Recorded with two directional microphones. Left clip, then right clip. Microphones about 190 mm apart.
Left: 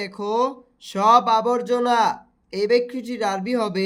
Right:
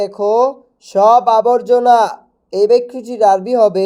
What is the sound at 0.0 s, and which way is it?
Speech, 5° right (ahead or behind).